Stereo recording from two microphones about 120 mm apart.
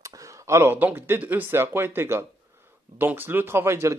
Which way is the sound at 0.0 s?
30° right (ahead or behind).